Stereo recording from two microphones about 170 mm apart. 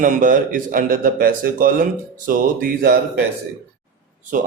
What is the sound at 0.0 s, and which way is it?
Speech, 50° right (ahead or behind).